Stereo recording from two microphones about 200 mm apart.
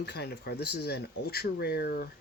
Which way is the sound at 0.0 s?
55° left (ahead or behind).